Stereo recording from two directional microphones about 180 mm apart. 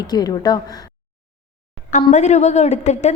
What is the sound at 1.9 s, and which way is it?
A woman's voice, 40° left (ahead or behind).